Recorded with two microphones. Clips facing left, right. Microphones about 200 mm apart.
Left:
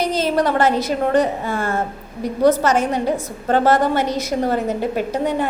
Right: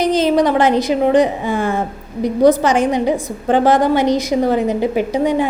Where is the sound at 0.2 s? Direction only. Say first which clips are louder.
Right 2 dB; 15° right (ahead or behind).